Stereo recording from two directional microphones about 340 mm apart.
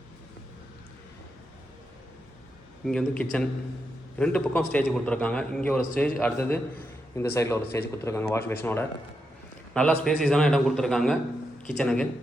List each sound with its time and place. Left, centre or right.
2.8 s a man's voice: centre